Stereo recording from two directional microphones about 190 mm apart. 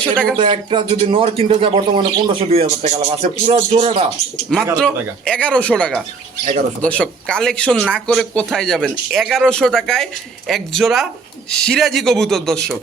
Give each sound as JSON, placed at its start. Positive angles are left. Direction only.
{"t": 0.0, "sound": "speech", "side_deg": 5}
{"t": 0.3, "sound": "a man's voice", "side_deg": -25}
{"t": 4.8, "sound": "speech", "side_deg": 5}